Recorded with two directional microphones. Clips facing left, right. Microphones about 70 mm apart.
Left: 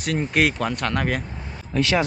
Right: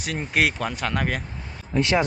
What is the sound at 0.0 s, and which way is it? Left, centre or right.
Speech, centre.